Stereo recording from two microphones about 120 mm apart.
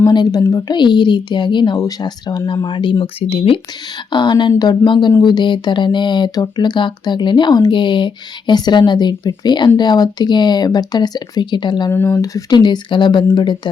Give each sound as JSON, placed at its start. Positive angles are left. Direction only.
{"t": 0.0, "sound": "speech", "side_deg": 35}
{"t": 4.1, "sound": "speech", "side_deg": 40}
{"t": 11.9, "sound": "speech", "side_deg": 20}